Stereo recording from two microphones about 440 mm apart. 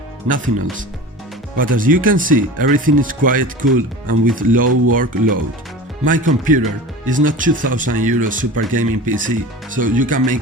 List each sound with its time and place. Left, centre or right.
0.3 s speech: centre